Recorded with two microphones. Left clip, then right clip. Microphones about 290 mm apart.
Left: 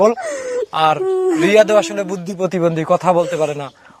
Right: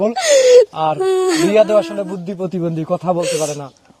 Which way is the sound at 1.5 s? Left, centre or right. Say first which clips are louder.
Left 2 dB; left.